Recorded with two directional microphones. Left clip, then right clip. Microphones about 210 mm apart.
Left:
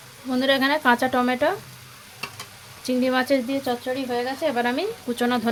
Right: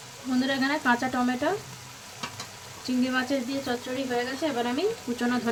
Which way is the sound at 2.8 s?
45° left (ahead or behind).